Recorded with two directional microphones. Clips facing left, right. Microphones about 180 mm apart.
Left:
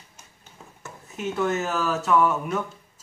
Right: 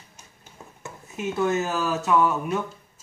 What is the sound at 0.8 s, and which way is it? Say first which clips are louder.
Speech: right 1 dB; 10° right (ahead or behind).